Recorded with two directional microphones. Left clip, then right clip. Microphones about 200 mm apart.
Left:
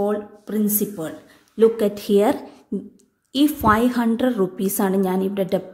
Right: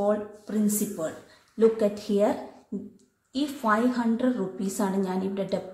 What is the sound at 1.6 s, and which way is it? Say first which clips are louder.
A woman's voice: left 5 dB; 50° left (ahead or behind).